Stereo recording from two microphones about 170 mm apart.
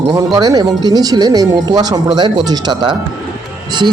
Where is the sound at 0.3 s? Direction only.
25° right (ahead or behind).